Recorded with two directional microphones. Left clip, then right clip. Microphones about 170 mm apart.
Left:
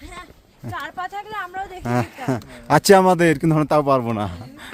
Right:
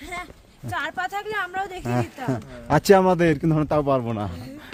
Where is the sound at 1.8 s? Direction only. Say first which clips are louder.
Left 3 dB; 25° left (ahead or behind).